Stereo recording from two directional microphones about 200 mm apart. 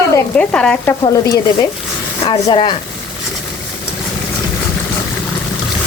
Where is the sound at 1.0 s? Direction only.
20° left (ahead or behind).